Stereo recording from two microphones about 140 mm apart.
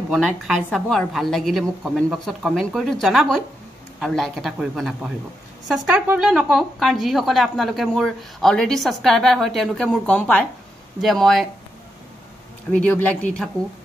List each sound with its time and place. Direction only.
0.1 s a woman's voice: 5° left (ahead or behind)
12.7 s speech: 10° left (ahead or behind)